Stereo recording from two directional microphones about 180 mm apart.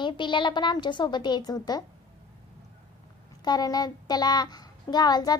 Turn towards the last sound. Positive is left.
turn(degrees=20)  # may be behind; listen again after turning